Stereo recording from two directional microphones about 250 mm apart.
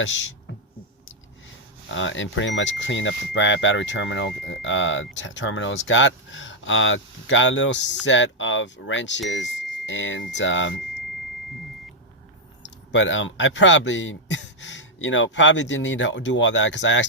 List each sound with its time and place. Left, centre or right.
0.0 s speech: left
1.9 s speech: left
12.9 s speech: left